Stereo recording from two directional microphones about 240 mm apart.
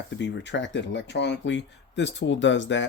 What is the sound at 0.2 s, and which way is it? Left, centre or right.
Speech, left.